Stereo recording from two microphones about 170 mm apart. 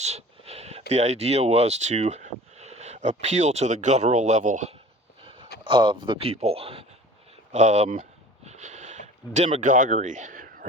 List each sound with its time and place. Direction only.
0.0 s speech: 40° right (ahead or behind)
5.6 s speech: 30° right (ahead or behind); by 8.0 s 45° right (ahead or behind)
8.4 s a sound: 45° right (ahead or behind)